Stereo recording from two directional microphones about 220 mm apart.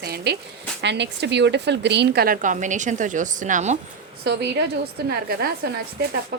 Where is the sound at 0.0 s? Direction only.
45° right (ahead or behind).